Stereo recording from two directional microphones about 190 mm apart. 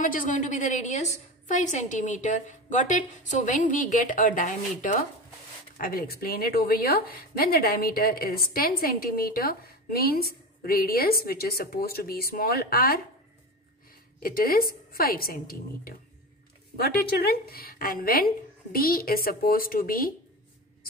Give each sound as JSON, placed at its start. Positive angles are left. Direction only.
{"t": 0.0, "sound": "a woman's voice", "side_deg": 45}
{"t": 14.2, "sound": "a woman's voice", "side_deg": 50}